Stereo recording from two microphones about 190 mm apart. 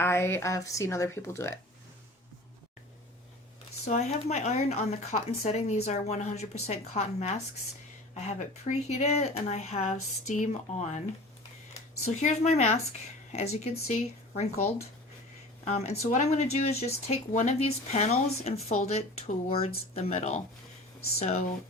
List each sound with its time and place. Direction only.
0.0 s speech: 15° left (ahead or behind)
3.8 s speech: 35° left (ahead or behind)
12.2 s speech: 35° left (ahead or behind)
15.6 s speech: 35° left (ahead or behind)